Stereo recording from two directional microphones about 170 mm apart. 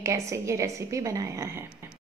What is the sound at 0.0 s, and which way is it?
A woman's voice, 15° right (ahead or behind).